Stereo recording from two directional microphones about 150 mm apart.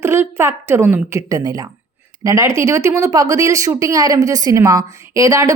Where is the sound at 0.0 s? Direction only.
15° right (ahead or behind).